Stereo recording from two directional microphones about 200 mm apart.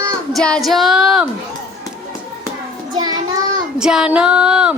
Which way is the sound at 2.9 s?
20° right (ahead or behind).